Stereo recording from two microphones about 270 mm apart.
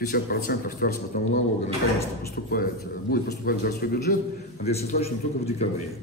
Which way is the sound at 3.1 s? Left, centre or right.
Left.